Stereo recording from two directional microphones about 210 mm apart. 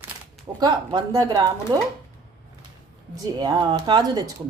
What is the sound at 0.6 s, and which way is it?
Speech, 20° right (ahead or behind).